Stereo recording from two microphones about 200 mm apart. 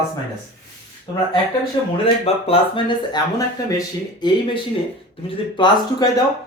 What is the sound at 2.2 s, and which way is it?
Speech, 25° left (ahead or behind).